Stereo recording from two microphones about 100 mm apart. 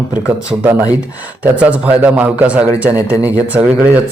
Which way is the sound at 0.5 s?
15° right (ahead or behind).